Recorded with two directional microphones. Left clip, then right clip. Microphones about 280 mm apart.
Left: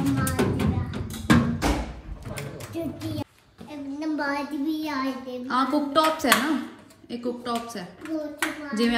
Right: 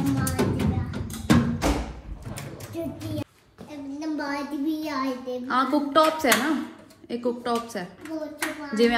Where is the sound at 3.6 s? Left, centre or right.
Centre.